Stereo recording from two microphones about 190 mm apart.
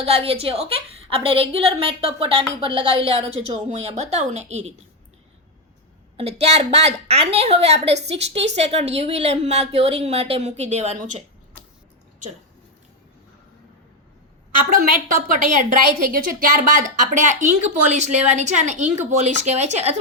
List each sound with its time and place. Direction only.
0.0 s a woman's voice: 30° right (ahead or behind)
6.1 s a woman's voice: 35° right (ahead or behind)
14.7 s a woman's voice: 50° right (ahead or behind)